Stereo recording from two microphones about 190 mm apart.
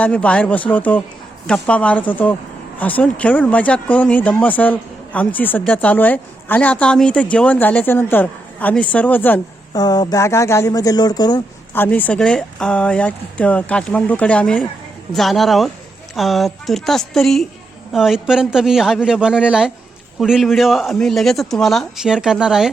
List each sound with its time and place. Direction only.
0.0 s speech: 5° left (ahead or behind)
9.8 s speech: 20° left (ahead or behind)
11.7 s speech: 10° left (ahead or behind)